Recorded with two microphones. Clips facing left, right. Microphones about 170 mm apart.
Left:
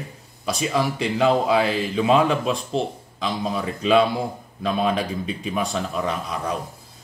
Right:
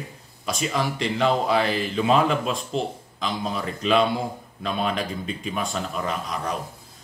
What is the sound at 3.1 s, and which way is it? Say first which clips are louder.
Speech: left 3 dB; 5° left (ahead or behind).